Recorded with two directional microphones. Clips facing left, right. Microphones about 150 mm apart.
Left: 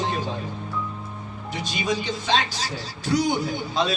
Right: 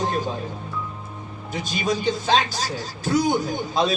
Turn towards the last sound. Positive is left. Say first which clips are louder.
# right 2 dB
turn(degrees=-45)  # may be behind; listen again after turning